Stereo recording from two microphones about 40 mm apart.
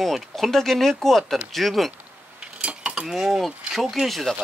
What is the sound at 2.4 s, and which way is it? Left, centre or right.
Cutlery, right.